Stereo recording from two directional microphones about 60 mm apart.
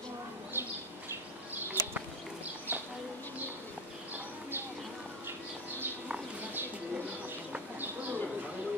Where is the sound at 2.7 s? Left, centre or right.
Right.